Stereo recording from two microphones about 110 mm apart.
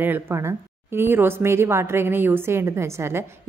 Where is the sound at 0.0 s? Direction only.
20° right (ahead or behind).